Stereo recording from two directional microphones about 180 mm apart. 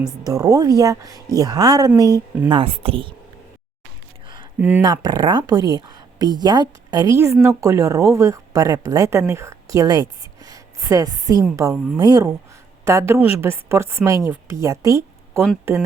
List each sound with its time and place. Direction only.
0.3 s a woman's voice: 20° right (ahead or behind)
4.8 s a woman's voice: 25° right (ahead or behind)